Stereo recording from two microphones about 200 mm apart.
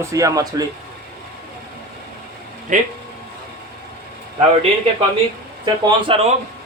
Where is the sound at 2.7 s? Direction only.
40° right (ahead or behind).